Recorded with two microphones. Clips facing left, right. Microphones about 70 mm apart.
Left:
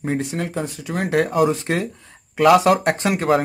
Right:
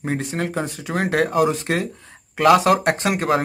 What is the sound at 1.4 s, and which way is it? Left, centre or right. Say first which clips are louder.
Speech: left 1 dB; right.